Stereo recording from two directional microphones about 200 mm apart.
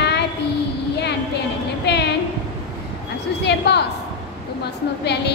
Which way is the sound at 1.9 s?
55° left (ahead or behind).